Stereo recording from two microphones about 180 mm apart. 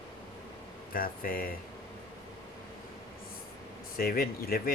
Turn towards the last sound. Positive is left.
turn(degrees=55)  # may be behind; listen again after turning